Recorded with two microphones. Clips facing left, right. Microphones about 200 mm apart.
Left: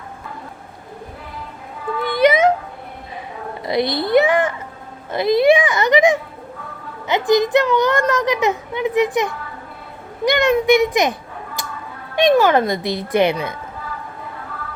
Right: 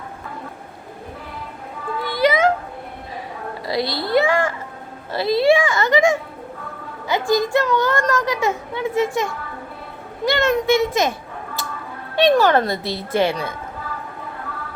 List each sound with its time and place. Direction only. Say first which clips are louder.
2.0 s music: left 3 dB; 20° left (ahead or behind)
3.7 s a child's voice: left 4 dB; 20° left (ahead or behind)
11.6 s a sound: even; 15° left (ahead or behind)
12.1 s speech: left 1 dB; 15° left (ahead or behind)